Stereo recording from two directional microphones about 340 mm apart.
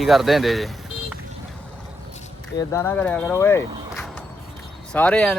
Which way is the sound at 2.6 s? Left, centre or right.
Centre.